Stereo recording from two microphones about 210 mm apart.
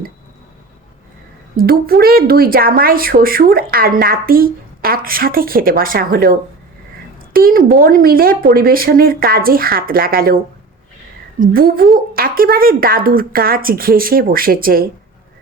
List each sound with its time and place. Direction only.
1.5 s a woman's voice: 45° right (ahead or behind)
7.3 s a woman's voice: 45° right (ahead or behind)
11.3 s a woman's voice: 45° right (ahead or behind)